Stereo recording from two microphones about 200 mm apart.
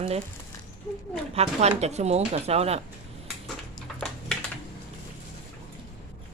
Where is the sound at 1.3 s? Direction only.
30° right (ahead or behind).